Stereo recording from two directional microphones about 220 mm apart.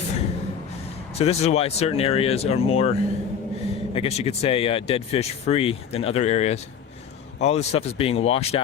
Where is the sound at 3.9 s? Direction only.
25° left (ahead or behind).